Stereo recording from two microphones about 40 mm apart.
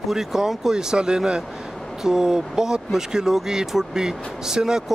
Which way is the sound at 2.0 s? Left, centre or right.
Centre.